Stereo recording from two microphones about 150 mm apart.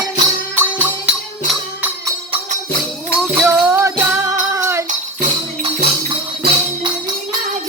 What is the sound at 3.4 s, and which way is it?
Music, 10° right (ahead or behind).